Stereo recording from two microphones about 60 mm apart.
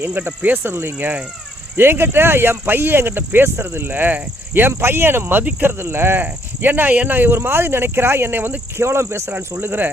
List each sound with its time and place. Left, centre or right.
0.0 s speech: right
1.7 s speech: right
8.8 s speech: right
9.3 s speech: right